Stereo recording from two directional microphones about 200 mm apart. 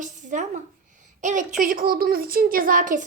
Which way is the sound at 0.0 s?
40° right (ahead or behind).